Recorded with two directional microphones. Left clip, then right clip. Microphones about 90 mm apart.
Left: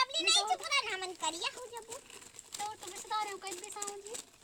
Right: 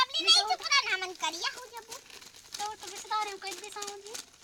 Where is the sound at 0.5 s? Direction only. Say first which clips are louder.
Right 5 dB; 35° left (ahead or behind).